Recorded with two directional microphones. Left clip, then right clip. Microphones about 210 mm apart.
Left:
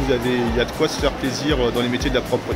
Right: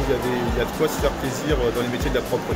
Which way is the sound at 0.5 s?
50° left (ahead or behind).